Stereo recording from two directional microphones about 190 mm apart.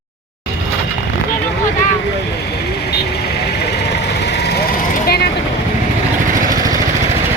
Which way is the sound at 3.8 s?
60° left (ahead or behind).